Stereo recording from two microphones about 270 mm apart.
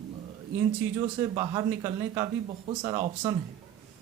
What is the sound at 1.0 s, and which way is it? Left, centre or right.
Speech, centre.